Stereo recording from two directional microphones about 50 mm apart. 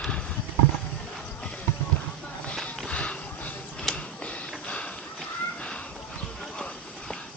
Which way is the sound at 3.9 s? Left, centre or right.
Centre.